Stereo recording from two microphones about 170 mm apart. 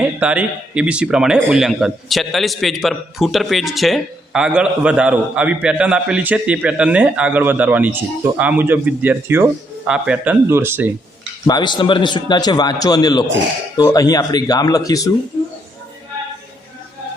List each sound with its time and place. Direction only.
0.0 s speech: 10° right (ahead or behind)
11.4 s a man's voice: 25° left (ahead or behind)